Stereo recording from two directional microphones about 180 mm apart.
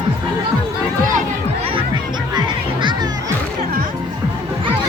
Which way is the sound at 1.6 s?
30° right (ahead or behind).